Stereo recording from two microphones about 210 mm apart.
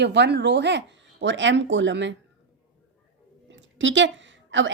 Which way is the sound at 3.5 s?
60° right (ahead or behind).